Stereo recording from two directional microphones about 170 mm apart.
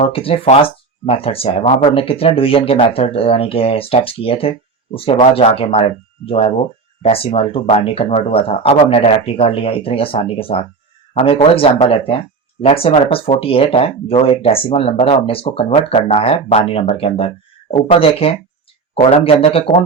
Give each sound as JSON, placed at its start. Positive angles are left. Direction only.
{"t": 0.0, "sound": "speech", "side_deg": 35}